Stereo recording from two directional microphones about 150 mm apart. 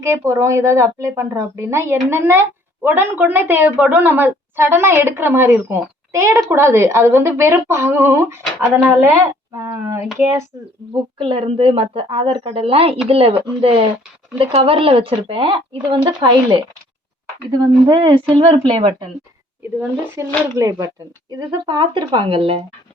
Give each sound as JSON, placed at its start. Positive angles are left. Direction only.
{"t": 0.0, "sound": "a woman's voice", "side_deg": -20}
{"t": 11.2, "sound": "speech", "side_deg": -35}
{"t": 19.6, "sound": "a woman's voice", "side_deg": -15}